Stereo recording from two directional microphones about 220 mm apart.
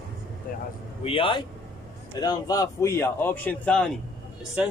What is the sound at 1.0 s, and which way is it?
A man's voice, 25° left (ahead or behind).